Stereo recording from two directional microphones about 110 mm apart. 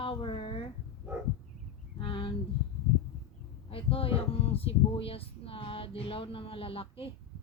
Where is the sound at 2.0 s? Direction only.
50° left (ahead or behind).